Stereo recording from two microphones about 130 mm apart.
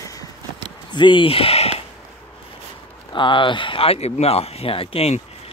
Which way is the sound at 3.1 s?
40° left (ahead or behind).